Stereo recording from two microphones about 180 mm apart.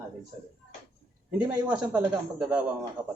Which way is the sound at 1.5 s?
5° right (ahead or behind).